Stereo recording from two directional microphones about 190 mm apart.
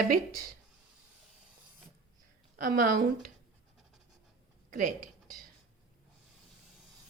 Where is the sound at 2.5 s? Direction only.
45° right (ahead or behind).